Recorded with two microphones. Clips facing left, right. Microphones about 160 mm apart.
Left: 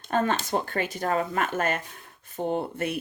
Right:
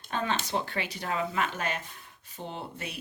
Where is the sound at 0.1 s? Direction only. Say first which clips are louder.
Left 5 dB; 50° left (ahead or behind).